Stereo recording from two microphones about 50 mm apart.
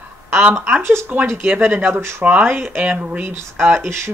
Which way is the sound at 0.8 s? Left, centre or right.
Right.